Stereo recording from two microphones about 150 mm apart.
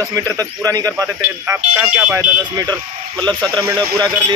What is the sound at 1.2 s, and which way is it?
Speech, 10° right (ahead or behind).